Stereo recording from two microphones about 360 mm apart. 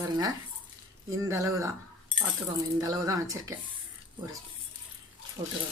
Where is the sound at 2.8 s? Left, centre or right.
Centre.